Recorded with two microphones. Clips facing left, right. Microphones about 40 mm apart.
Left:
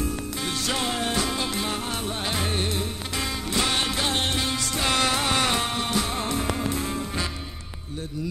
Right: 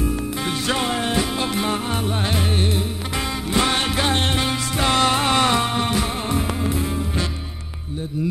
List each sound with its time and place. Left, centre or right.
0.0 s music: right
4.8 s music: right
5.7 s music: right